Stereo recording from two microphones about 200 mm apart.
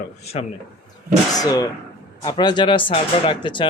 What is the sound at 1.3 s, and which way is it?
Speech, 20° left (ahead or behind).